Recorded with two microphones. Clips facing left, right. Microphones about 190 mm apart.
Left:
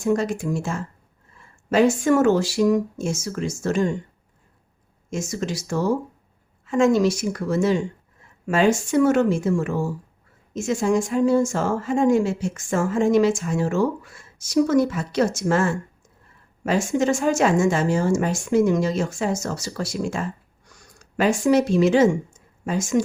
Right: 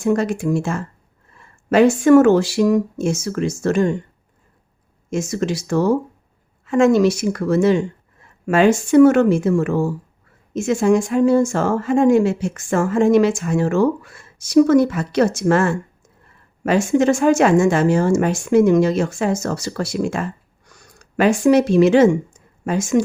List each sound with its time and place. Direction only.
0.0 s speech: 65° right (ahead or behind)
5.1 s speech: 65° right (ahead or behind)